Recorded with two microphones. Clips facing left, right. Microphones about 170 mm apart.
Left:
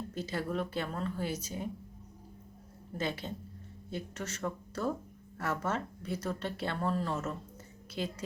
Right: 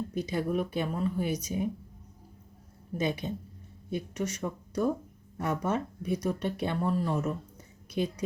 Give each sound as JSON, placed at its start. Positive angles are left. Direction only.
{"t": 0.1, "sound": "speech", "side_deg": -15}
{"t": 3.0, "sound": "speech", "side_deg": -15}